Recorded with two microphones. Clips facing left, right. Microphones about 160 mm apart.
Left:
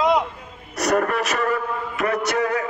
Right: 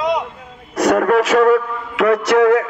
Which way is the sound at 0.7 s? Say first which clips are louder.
Right 7 dB; 90° right.